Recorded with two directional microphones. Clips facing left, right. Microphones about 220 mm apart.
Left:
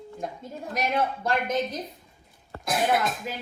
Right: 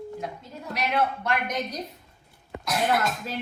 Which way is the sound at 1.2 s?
30° left (ahead or behind).